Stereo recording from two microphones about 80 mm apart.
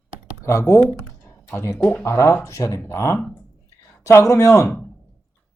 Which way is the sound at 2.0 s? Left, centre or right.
Left.